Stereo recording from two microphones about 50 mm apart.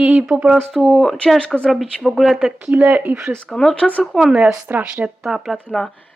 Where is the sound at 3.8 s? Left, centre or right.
Left.